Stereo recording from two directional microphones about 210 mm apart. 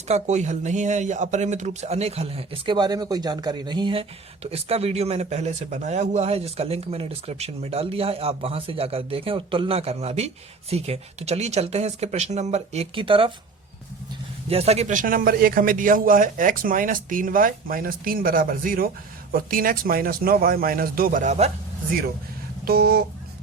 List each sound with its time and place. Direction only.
0.1 s speech: 35° right (ahead or behind)
14.5 s a man's voice: 30° right (ahead or behind)
22.6 s speech: 45° right (ahead or behind)